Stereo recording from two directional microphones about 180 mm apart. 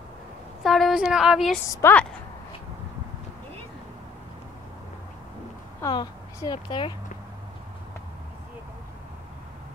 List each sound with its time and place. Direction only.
0.7 s speech: centre (ahead or behind)
1.7 s a woman's voice: 15° left (ahead or behind)
5.8 s a woman's voice: 20° left (ahead or behind)